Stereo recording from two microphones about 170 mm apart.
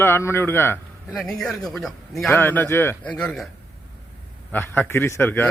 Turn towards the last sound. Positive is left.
turn(degrees=10)  # may be behind; listen again after turning